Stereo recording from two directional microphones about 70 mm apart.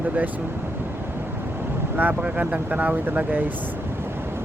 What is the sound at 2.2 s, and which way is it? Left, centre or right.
Speech, centre.